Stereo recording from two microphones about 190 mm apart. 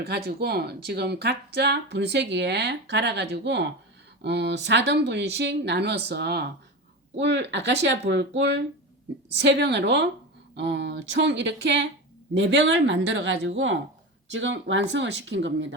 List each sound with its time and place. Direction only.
0.3 s speech: 55° right (ahead or behind)